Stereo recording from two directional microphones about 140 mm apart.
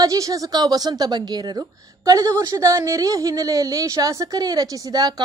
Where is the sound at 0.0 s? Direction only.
25° right (ahead or behind).